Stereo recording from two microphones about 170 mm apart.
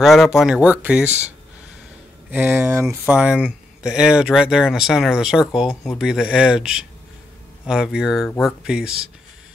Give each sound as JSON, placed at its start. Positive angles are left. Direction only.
{"t": 0.0, "sound": "speech", "side_deg": 0}
{"t": 2.3, "sound": "speech", "side_deg": -10}